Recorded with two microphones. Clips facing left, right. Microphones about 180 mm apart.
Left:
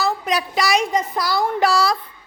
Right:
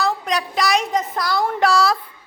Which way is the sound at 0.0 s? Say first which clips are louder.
Even; 5° left (ahead or behind).